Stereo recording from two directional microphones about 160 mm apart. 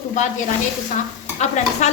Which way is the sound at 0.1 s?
50° left (ahead or behind).